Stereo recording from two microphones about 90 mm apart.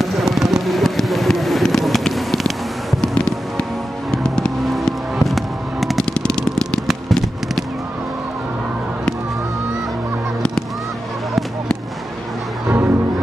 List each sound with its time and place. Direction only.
0.0 s fireworks: 5° right (ahead or behind)
3.0 s music: 10° left (ahead or behind)
4.1 s fireworks: 5° left (ahead or behind)
6.0 s vehicle: 10° left (ahead or behind)
6.9 s a sound: centre (ahead or behind)
12.7 s music: 25° right (ahead or behind)